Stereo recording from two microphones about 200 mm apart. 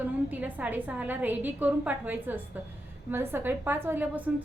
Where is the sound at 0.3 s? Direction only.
10° right (ahead or behind).